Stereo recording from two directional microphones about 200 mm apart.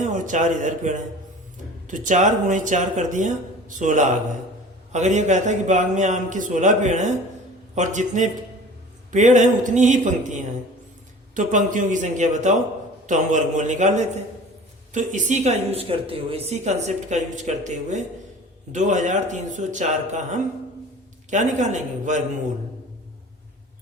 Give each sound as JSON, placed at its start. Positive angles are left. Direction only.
{"t": 0.0, "sound": "a man's voice", "side_deg": -40}